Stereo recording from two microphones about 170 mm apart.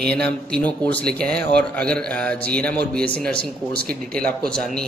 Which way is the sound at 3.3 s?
70° right (ahead or behind).